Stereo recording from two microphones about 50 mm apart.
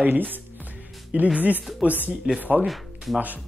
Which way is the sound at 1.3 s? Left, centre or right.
Right.